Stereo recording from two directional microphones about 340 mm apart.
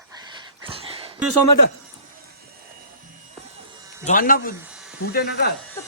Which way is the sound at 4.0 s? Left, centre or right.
Left.